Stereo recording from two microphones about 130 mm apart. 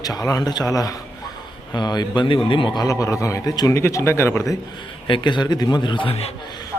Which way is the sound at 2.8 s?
25° left (ahead or behind).